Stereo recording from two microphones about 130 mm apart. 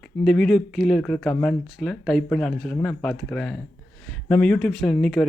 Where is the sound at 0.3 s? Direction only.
5° left (ahead or behind).